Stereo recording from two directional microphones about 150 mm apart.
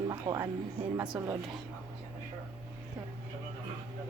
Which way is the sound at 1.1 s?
10° right (ahead or behind).